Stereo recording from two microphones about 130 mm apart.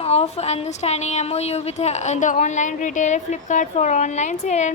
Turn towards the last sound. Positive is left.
turn(degrees=60)  # may be behind; listen again after turning